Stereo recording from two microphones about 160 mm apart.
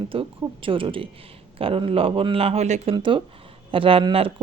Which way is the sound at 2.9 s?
30° right (ahead or behind).